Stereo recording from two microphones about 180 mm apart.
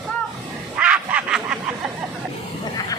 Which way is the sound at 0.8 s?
5° right (ahead or behind).